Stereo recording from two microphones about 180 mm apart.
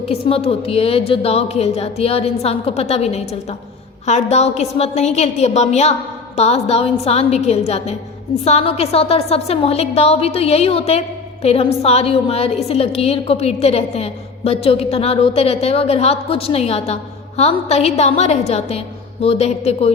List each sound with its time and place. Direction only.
0.0 s a woman's voice: 35° left (ahead or behind)